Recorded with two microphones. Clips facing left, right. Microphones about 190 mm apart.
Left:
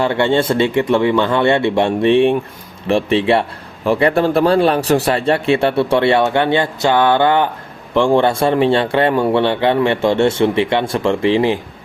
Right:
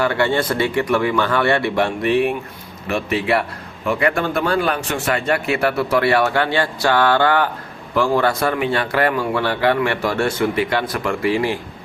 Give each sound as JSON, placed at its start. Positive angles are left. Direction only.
{"t": 0.0, "sound": "a man's voice", "side_deg": 25}